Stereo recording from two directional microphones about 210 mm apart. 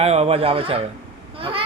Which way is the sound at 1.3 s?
25° right (ahead or behind).